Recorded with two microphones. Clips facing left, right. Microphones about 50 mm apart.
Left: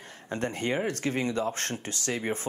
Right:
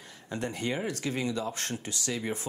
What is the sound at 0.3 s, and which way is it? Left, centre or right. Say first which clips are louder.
Speech: left 3 dB; left.